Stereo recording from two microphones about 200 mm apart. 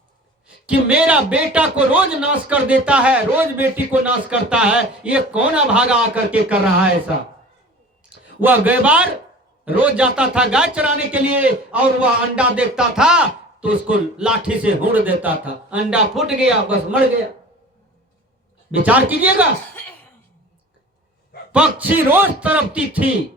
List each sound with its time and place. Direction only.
0.4 s a man's voice: 5° right (ahead or behind)
8.4 s a man's voice: 10° right (ahead or behind)
18.7 s a man's voice: 5° right (ahead or behind)
21.5 s a man's voice: 5° right (ahead or behind)